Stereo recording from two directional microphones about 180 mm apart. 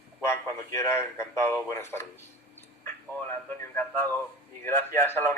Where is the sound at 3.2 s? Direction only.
10° left (ahead or behind).